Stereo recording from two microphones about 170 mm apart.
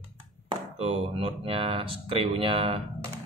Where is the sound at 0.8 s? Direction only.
35° right (ahead or behind).